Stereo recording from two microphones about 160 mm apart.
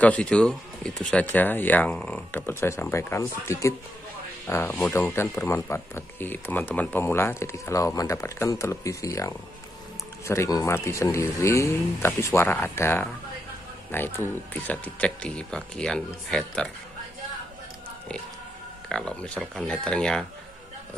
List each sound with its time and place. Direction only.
0.0 s speech: 10° left (ahead or behind)
18.9 s speech: 5° left (ahead or behind)